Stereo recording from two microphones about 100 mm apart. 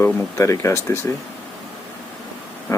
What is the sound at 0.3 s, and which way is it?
Speech, 30° left (ahead or behind).